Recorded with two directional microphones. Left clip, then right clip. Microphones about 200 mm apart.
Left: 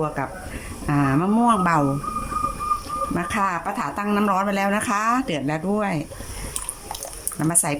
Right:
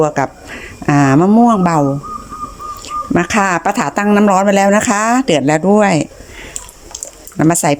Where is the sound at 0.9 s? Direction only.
40° right (ahead or behind).